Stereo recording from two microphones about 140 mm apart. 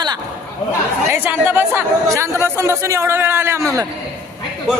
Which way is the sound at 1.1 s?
15° right (ahead or behind).